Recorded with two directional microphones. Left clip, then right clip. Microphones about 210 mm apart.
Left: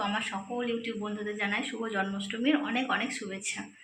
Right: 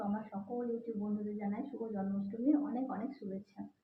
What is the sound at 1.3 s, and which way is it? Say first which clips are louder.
Speech: left 10 dB; 20° left (ahead or behind).